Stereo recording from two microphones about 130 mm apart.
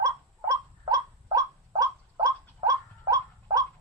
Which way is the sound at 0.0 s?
25° right (ahead or behind).